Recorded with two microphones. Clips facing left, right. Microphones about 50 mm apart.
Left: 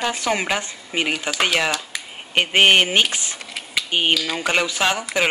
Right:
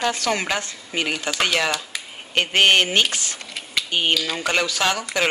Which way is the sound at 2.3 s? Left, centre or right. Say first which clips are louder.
Left 2 dB; centre.